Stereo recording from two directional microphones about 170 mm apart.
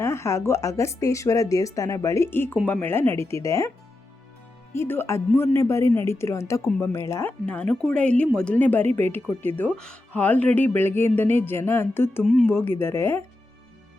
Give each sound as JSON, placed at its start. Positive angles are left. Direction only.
{"t": 0.0, "sound": "speech", "side_deg": 15}
{"t": 4.7, "sound": "speech", "side_deg": 15}